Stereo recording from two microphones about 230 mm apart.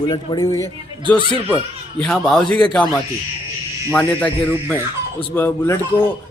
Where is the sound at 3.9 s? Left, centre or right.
Centre.